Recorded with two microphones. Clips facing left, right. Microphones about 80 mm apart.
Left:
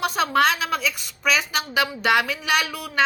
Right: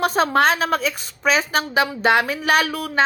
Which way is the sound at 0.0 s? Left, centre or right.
Right.